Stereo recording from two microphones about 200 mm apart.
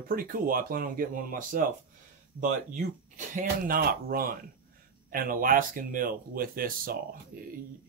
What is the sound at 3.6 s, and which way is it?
Speech, 45° right (ahead or behind).